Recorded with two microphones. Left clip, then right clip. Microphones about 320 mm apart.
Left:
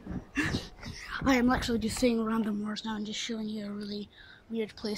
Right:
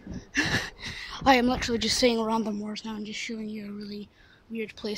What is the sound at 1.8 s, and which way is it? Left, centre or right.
Speech, centre.